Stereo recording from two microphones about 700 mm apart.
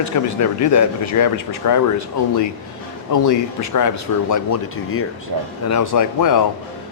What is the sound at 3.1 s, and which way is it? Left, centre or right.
Speech, left.